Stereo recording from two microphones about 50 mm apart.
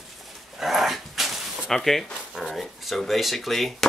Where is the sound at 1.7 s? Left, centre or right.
Centre.